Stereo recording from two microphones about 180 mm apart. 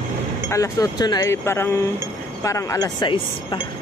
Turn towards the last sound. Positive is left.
turn(degrees=25)  # may be behind; listen again after turning